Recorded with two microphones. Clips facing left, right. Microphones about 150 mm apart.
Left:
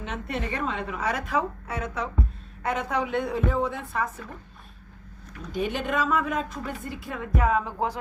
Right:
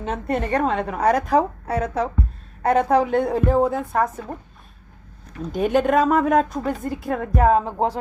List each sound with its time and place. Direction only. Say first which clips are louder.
0.0 s a woman's voice: right 7 dB; 40° right (ahead or behind)
5.5 s a woman's voice: right 9 dB; 45° right (ahead or behind); by 7.9 s 30° right (ahead or behind)